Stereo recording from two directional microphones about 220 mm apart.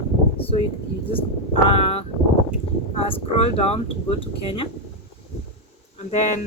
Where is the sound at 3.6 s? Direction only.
25° left (ahead or behind).